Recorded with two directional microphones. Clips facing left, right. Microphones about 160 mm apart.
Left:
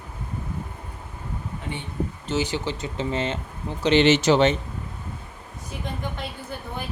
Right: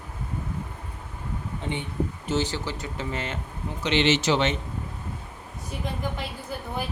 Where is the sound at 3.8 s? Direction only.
45° left (ahead or behind).